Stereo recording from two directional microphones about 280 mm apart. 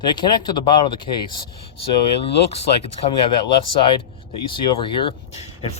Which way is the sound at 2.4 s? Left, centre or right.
Left.